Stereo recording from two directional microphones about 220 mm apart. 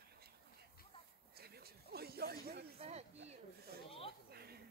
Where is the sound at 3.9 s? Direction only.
25° left (ahead or behind).